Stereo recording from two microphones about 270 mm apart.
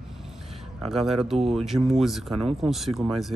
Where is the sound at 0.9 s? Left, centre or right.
Centre.